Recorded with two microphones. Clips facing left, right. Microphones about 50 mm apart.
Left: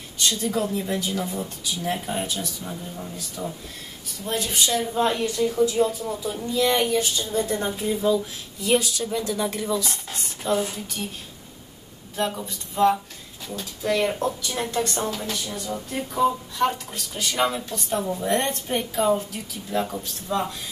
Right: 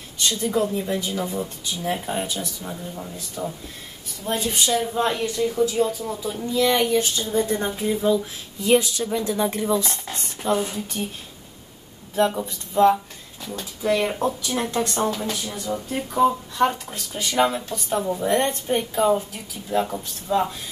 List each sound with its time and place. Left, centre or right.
0.2 s speech: centre
7.2 s speech: centre
8.7 s speech: right
10.2 s speech: centre
12.2 s speech: centre